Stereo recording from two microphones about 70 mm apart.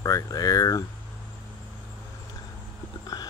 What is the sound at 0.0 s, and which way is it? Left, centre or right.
Speech, left.